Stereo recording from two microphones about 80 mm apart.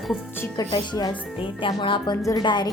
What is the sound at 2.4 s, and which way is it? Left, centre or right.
Speech, left.